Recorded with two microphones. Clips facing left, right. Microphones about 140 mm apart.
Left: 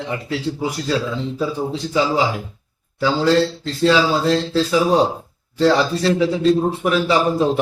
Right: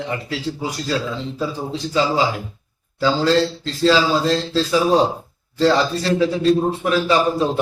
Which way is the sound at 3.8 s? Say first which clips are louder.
Even; 15° left (ahead or behind).